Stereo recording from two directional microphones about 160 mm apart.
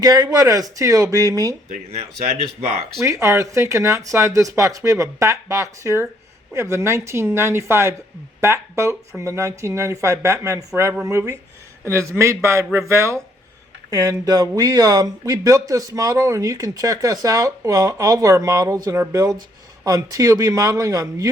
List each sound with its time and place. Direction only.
0.0 s speech: 25° right (ahead or behind)
2.6 s speech: 45° right (ahead or behind)
3.0 s speech: 20° right (ahead or behind)